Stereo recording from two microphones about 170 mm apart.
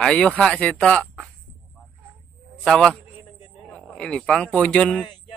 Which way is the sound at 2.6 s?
5° left (ahead or behind).